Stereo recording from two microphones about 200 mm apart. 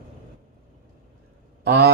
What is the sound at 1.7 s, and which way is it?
Speech, 50° right (ahead or behind).